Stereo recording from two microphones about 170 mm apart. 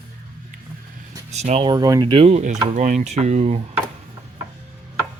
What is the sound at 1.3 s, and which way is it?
Speech, 40° right (ahead or behind).